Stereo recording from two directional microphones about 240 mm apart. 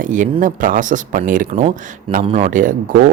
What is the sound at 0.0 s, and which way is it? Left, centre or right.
Speech, right.